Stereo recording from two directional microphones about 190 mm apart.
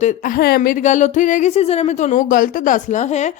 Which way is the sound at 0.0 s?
40° left (ahead or behind).